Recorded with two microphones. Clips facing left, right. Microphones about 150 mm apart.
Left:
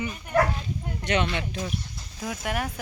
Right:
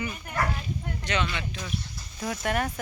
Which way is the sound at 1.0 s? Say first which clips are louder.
Left 4 dB; 60° left (ahead or behind).